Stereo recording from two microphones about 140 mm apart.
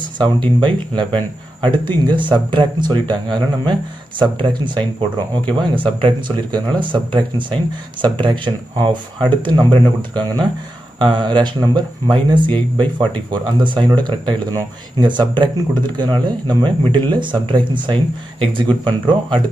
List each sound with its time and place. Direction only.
0.6 s speech: 35° right (ahead or behind)